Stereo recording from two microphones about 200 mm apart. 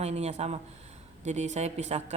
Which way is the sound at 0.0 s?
35° right (ahead or behind).